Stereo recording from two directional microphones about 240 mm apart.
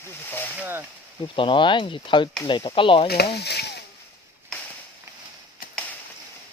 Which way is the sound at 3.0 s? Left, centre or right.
Left.